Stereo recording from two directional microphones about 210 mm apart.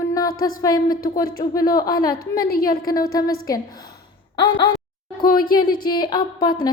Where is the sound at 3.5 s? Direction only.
15° left (ahead or behind).